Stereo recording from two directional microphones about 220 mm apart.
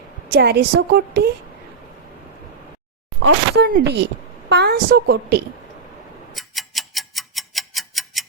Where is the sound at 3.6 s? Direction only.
50° right (ahead or behind).